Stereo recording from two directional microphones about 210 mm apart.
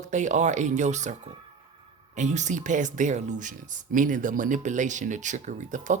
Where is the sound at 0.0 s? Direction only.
35° right (ahead or behind).